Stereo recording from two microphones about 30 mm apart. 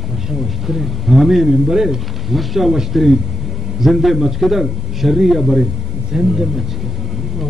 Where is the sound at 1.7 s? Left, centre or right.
Centre.